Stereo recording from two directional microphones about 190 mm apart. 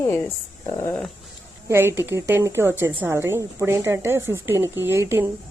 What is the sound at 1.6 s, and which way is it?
A woman's voice, 15° right (ahead or behind).